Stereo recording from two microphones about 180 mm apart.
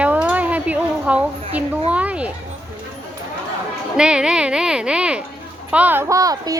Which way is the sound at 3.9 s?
5° right (ahead or behind).